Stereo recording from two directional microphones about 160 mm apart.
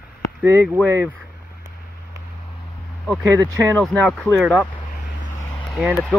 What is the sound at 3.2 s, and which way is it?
Speech, 20° right (ahead or behind).